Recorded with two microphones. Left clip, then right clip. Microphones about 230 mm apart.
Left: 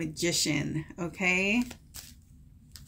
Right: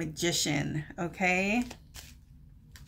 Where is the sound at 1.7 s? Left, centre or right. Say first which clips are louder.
Left 1 dB; centre.